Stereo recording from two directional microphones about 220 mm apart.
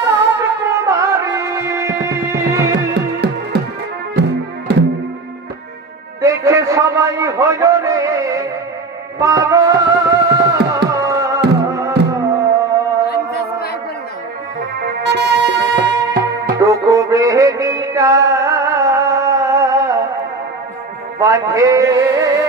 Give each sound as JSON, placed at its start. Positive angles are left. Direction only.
{"t": 0.3, "sound": "music", "side_deg": -15}
{"t": 2.9, "sound": "music", "side_deg": -50}
{"t": 4.7, "sound": "music", "side_deg": -50}
{"t": 6.2, "sound": "a sound", "side_deg": -15}
{"t": 9.2, "sound": "music", "side_deg": -15}
{"t": 14.6, "sound": "music", "side_deg": -45}
{"t": 16.5, "sound": "music", "side_deg": -15}
{"t": 21.2, "sound": "a sound", "side_deg": -15}